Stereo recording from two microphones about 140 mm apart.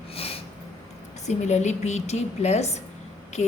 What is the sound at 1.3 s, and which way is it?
A woman's voice, 55° left (ahead or behind).